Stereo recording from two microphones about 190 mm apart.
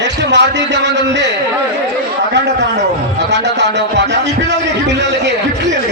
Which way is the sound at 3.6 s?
65° right (ahead or behind).